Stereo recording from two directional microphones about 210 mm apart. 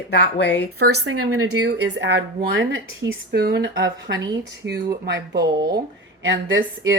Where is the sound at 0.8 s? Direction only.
90° right.